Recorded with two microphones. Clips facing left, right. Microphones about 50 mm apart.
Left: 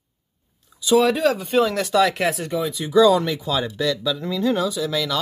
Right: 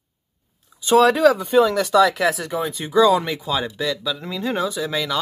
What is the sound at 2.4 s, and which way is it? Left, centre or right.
Speech, right.